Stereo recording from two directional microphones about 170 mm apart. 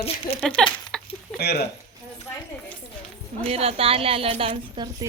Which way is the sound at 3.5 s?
35° right (ahead or behind).